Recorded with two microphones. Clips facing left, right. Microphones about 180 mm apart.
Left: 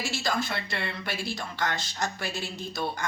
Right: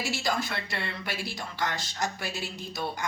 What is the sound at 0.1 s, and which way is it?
Speech, 15° right (ahead or behind).